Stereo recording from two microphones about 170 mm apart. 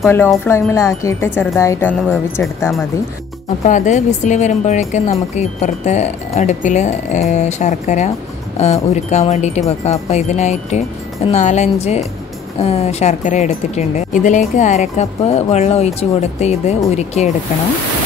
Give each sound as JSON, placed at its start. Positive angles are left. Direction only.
{"t": 0.5, "sound": "speech", "side_deg": 15}
{"t": 3.6, "sound": "speech", "side_deg": 45}